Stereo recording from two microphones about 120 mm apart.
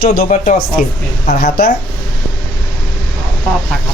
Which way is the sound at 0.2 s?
80° left.